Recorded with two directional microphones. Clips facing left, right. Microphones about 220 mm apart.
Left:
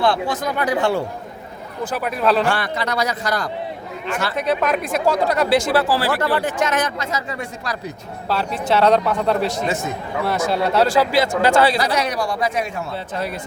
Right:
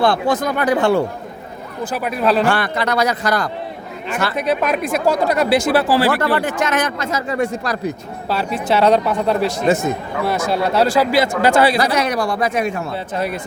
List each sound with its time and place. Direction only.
0.0 s speech: 45° right (ahead or behind)
1.8 s speech: 10° right (ahead or behind)
2.5 s a man's voice: 60° right (ahead or behind)
4.4 s speech: 10° right (ahead or behind)
5.7 s speech: 20° right (ahead or behind)
6.1 s speech: 55° right (ahead or behind)
8.3 s speech: 10° right (ahead or behind)
9.6 s speech: 45° right (ahead or behind)
10.5 s speech: 5° right (ahead or behind)
11.8 s speech: 50° right (ahead or behind)
13.1 s speech: 15° right (ahead or behind)